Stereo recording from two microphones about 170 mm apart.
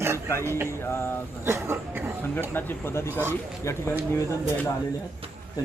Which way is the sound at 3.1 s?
15° right (ahead or behind).